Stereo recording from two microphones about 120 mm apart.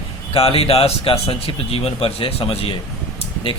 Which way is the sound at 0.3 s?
55° left (ahead or behind).